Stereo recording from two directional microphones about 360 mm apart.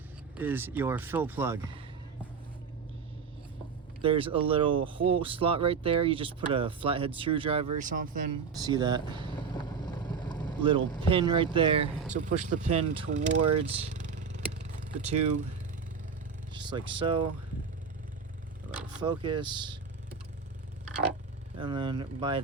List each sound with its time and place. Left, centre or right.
0.3 s speech: centre
4.0 s speech: centre
8.6 s speech: centre
9.3 s boat: centre
10.6 s speech: centre
13.4 s speech: right
13.8 s vehicle: centre
16.5 s speech: centre
19.0 s speech: centre
21.6 s speech: centre